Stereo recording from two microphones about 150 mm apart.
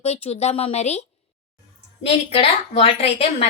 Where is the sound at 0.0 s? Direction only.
45° left (ahead or behind).